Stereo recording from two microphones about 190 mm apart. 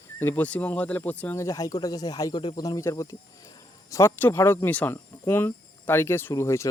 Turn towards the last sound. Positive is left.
turn(degrees=15)  # may be behind; listen again after turning